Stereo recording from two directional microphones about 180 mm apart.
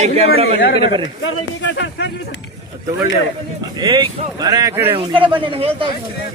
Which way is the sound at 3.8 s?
25° right (ahead or behind).